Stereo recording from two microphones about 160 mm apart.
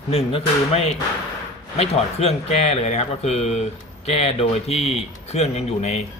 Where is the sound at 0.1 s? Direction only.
35° left (ahead or behind).